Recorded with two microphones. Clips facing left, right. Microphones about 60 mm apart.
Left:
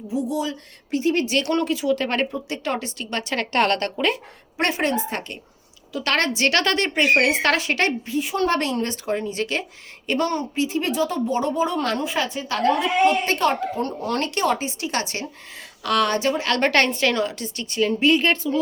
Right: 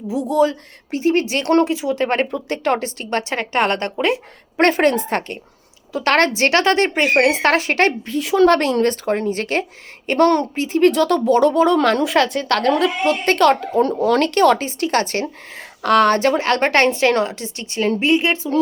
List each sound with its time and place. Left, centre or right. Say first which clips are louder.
0.1 s a woman's voice: right 8 dB; right
0.9 s a woman's voice: right 4 dB; right
2.5 s a woman's voice: right 7 dB; right
3.3 s a woman's voice: even; centre
4.5 s a woman's voice: right 7 dB; right
8.8 s a woman's voice: right 7 dB; right
10.2 s a woman's voice: right 10 dB; right
10.5 s speech: right 8 dB; right
13.2 s a woman's voice: right 6 dB; right
14.2 s a woman's voice: right 6 dB; right
18.1 s a woman's voice: right 2 dB; centre